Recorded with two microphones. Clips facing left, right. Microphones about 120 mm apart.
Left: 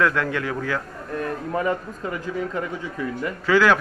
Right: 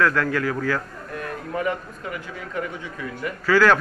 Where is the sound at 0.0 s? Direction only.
20° left (ahead or behind).